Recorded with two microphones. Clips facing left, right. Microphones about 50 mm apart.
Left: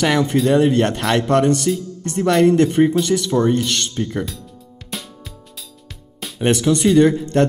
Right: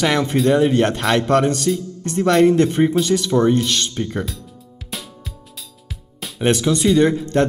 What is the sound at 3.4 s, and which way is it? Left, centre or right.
Speech, centre.